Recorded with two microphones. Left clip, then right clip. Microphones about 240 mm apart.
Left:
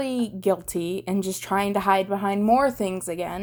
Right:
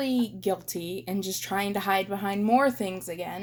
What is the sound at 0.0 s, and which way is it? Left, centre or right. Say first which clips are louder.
A woman's voice: left 3 dB; left.